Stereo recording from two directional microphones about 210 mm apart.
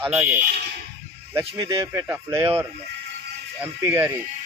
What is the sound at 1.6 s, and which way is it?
Speech, 15° right (ahead or behind).